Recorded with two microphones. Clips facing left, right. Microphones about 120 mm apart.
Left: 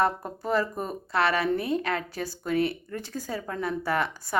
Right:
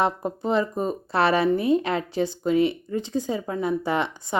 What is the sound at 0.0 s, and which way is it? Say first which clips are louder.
Speech: right 2 dB; 20° right (ahead or behind).